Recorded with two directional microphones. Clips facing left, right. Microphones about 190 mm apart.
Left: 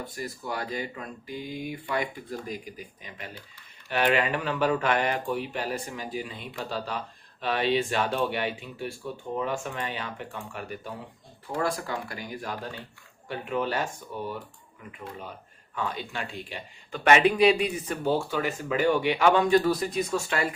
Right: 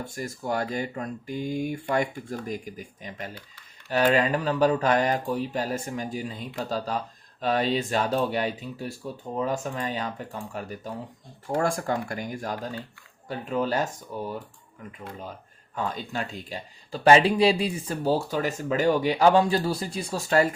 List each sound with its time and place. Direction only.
0.0 s speech: 45° right (ahead or behind)
15.7 s speech: 40° right (ahead or behind)